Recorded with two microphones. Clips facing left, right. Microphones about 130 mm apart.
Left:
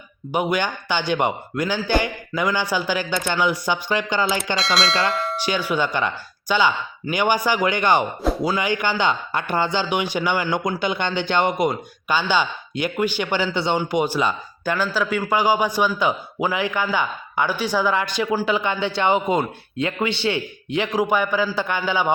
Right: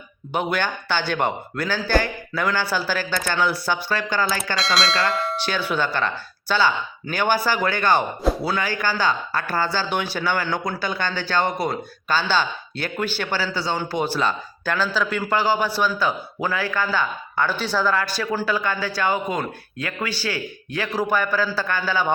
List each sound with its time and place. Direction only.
0.3 s speech: 15° left (ahead or behind)
4.5 s speech: centre (ahead or behind)
5.4 s a man's voice: 15° left (ahead or behind)